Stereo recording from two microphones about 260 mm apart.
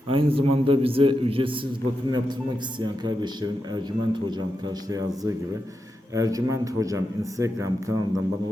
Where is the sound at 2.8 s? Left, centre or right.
Centre.